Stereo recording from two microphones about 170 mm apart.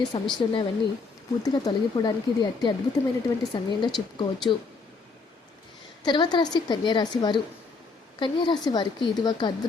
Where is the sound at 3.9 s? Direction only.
Centre (ahead or behind).